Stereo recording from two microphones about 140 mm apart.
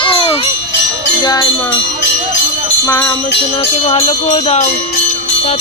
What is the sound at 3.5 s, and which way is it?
Speech, 50° left (ahead or behind).